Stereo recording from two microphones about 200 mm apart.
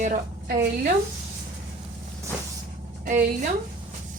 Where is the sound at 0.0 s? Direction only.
45° right (ahead or behind).